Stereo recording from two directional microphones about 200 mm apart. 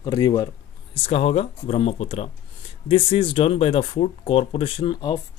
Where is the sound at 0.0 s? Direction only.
20° left (ahead or behind).